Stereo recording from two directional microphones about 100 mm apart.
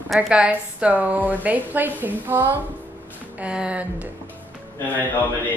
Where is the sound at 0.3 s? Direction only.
10° right (ahead or behind).